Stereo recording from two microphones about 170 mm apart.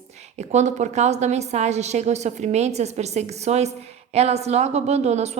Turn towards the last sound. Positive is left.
turn(degrees=-40)  # may be behind; listen again after turning